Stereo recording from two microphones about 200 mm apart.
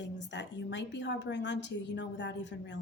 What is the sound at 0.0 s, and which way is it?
A woman's voice, 60° left (ahead or behind).